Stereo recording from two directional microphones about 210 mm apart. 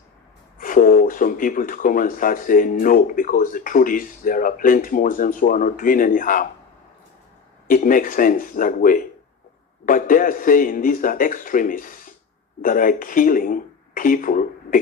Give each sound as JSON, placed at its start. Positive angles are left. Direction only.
{"t": 0.6, "sound": "speech", "side_deg": 40}
{"t": 7.7, "sound": "speech", "side_deg": 40}